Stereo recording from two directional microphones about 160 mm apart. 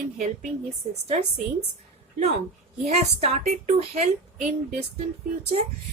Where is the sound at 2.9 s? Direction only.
40° right (ahead or behind).